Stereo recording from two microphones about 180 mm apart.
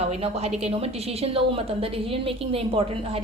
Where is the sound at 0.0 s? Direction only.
35° right (ahead or behind).